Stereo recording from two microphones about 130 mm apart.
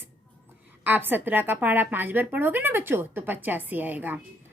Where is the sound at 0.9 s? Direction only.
15° right (ahead or behind).